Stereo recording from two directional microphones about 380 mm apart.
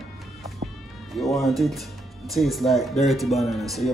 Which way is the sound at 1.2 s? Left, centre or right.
Centre.